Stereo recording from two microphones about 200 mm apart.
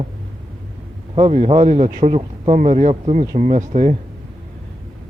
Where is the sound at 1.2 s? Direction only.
35° right (ahead or behind).